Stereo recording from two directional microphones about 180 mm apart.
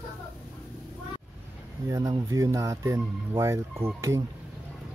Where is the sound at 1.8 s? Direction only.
20° right (ahead or behind).